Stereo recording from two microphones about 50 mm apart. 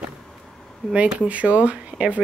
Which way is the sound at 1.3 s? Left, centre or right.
Right.